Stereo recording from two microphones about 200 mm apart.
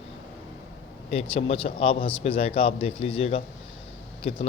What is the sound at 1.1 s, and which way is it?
A man's voice, 30° left (ahead or behind).